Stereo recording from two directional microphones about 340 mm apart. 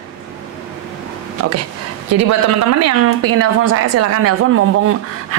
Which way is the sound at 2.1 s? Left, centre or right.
Right.